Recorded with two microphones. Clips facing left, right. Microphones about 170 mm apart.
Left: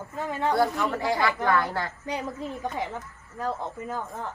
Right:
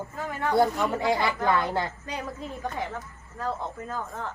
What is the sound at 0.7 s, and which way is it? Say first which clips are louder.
Speech: right 1 dB; 20° right (ahead or behind).